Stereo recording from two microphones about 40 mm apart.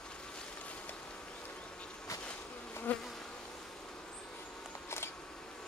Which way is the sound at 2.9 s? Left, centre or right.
Left.